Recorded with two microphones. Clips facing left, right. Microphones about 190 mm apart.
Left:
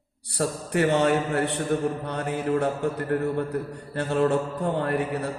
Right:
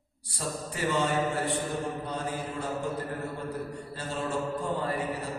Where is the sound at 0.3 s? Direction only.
65° left (ahead or behind).